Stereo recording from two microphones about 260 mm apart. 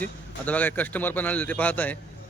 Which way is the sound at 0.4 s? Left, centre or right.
Centre.